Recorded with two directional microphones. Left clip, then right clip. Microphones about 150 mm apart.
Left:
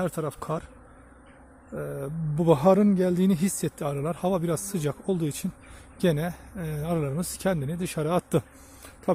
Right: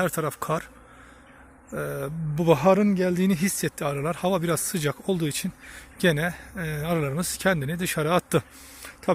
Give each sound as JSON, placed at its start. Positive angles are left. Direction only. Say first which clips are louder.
{"t": 0.0, "sound": "speech", "louder": "right 4 dB", "side_deg": 0}
{"t": 1.7, "sound": "speech", "louder": "right 3 dB", "side_deg": 0}
{"t": 2.3, "sound": "speech", "louder": "right 1 dB", "side_deg": 20}